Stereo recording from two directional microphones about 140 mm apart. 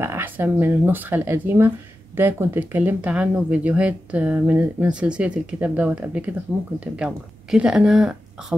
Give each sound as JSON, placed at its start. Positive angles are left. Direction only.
{"t": 0.0, "sound": "a woman's voice", "side_deg": -15}